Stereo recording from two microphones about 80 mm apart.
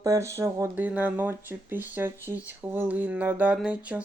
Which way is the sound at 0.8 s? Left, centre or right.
Right.